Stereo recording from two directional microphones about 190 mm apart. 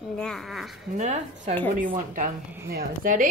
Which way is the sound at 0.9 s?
40° right (ahead or behind).